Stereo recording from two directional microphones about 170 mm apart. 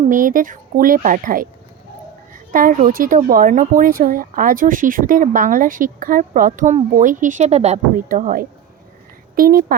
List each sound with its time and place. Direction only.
0.1 s speech: 50° right (ahead or behind)